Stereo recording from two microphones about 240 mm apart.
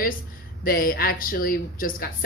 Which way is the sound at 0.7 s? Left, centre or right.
Left.